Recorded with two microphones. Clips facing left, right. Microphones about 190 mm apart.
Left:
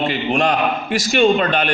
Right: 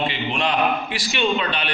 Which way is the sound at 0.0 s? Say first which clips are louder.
Left 6 dB; 45° left (ahead or behind).